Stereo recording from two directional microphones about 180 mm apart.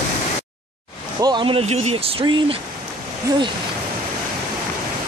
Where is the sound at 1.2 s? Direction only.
25° right (ahead or behind).